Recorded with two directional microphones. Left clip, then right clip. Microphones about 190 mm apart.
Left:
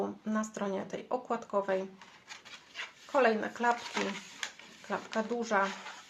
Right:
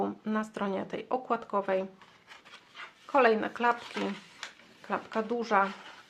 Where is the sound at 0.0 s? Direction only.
30° right (ahead or behind).